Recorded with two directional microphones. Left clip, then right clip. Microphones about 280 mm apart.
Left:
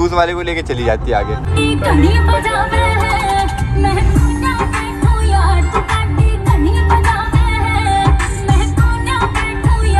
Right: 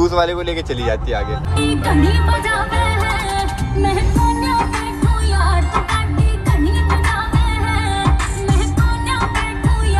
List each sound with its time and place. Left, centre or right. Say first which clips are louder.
0.0 s speech: left 2 dB; centre
1.7 s music: left 3 dB; right